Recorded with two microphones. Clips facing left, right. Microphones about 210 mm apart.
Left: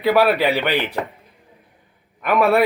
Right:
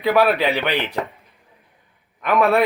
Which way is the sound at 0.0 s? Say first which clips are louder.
Left 1 dB; centre (ahead or behind).